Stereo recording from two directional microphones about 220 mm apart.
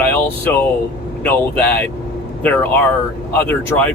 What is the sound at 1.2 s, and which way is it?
Speech, 5° left (ahead or behind).